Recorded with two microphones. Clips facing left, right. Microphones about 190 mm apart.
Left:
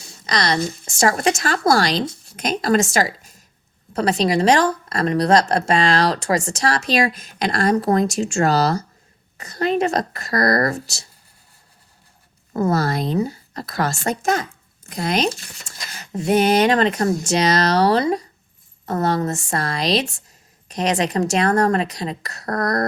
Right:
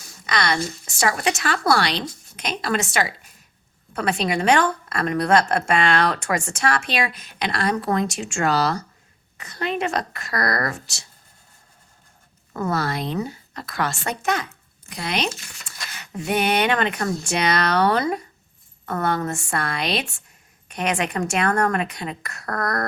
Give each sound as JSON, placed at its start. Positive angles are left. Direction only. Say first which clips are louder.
{"t": 0.0, "sound": "a sound", "louder": "left 2 dB", "side_deg": 35}
{"t": 0.9, "sound": "a woman's voice", "louder": "left 4 dB", "side_deg": 40}
{"t": 12.5, "sound": "speech", "louder": "left 5 dB", "side_deg": 40}
{"t": 19.5, "sound": "speech", "louder": "left 5 dB", "side_deg": 40}